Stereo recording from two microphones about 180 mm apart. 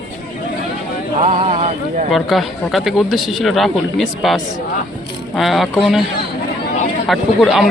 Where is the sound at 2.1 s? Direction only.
Centre (ahead or behind).